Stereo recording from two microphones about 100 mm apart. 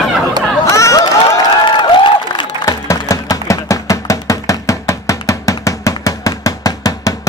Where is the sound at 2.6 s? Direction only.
35° left (ahead or behind).